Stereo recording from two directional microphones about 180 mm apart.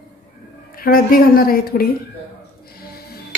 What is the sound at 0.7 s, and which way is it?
A woman's voice, 55° left (ahead or behind).